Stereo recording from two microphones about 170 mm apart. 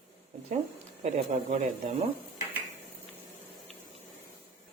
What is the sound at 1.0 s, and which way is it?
Speech, 45° right (ahead or behind).